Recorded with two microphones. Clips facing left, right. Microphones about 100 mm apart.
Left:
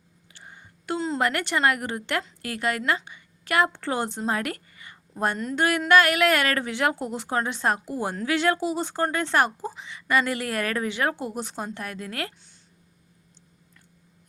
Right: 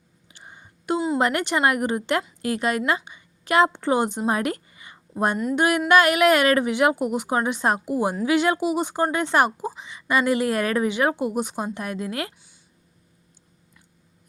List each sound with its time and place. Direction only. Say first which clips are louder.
0.3 s a woman's voice: right 1 dB; 20° right (ahead or behind)